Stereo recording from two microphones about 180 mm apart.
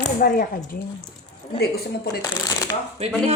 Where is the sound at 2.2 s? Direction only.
20° left (ahead or behind).